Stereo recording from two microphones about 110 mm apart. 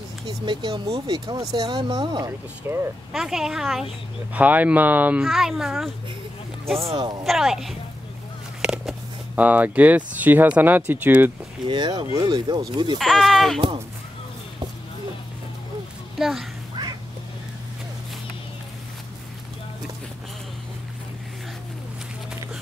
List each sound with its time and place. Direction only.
0.5 s speech: 45° right (ahead or behind)
2.6 s speech: 20° right (ahead or behind)
3.1 s speech: 5° right (ahead or behind)
4.3 s speech: 15° right (ahead or behind)
5.2 s speech: centre (ahead or behind)
7.0 s speech: 40° right (ahead or behind)
7.2 s speech: 5° right (ahead or behind)
11.7 s speech: 40° right (ahead or behind)
13.0 s speech: centre (ahead or behind)
16.2 s speech: centre (ahead or behind)